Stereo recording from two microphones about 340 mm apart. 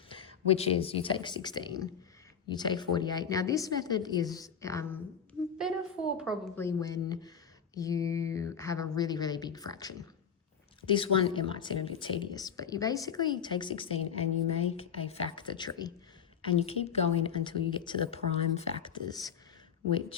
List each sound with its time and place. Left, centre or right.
0.1 s speech: centre
5.6 s a sound: centre
6.1 s speech: centre